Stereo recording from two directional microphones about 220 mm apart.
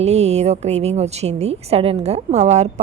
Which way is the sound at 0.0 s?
30° right (ahead or behind).